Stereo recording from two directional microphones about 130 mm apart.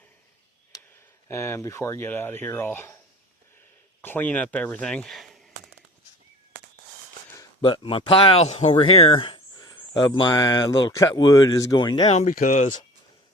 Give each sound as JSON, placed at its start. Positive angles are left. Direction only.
{"t": 1.3, "sound": "speech", "side_deg": 20}
{"t": 4.0, "sound": "speech", "side_deg": 15}
{"t": 7.6, "sound": "speech", "side_deg": 40}
{"t": 12.0, "sound": "speech", "side_deg": 55}
{"t": 12.3, "sound": "speech", "side_deg": 80}